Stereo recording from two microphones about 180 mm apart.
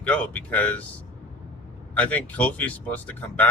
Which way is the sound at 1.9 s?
10° left (ahead or behind).